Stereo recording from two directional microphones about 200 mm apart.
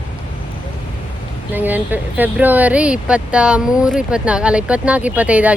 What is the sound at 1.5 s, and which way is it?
Speech, 10° right (ahead or behind).